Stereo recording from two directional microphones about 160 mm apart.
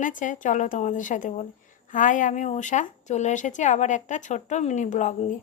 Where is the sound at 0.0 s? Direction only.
55° left (ahead or behind).